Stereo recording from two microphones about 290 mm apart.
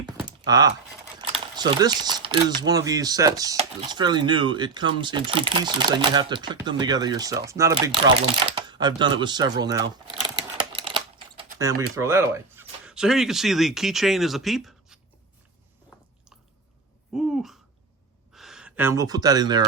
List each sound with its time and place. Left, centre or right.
0.3 s a sound: centre
1.2 s speech: centre
8.5 s crumpling: centre
11.9 s speech: centre
17.2 s a sound: centre
18.3 s speech: centre